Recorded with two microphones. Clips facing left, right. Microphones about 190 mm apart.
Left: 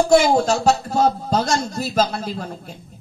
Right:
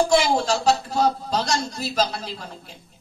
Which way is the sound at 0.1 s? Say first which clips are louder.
Left 5 dB; 50° left (ahead or behind).